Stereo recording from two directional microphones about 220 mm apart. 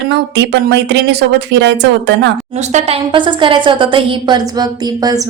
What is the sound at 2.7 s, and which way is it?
A woman's voice, 25° right (ahead or behind).